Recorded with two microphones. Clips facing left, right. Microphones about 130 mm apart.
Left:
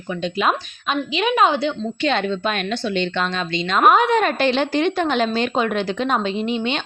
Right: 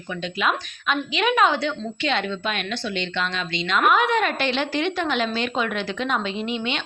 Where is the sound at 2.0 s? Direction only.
40° left (ahead or behind).